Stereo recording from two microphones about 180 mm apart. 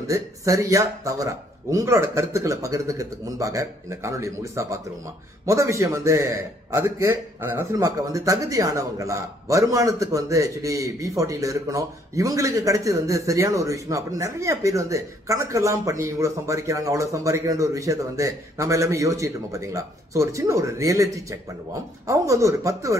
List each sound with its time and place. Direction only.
0.1 s a man's voice: 20° right (ahead or behind)